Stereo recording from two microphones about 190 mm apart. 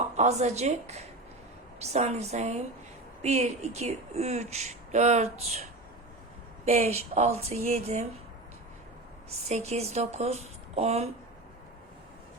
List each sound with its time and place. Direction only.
0.2 s speech: 35° right (ahead or behind)
6.7 s speech: 35° right (ahead or behind)
9.5 s speech: 35° right (ahead or behind)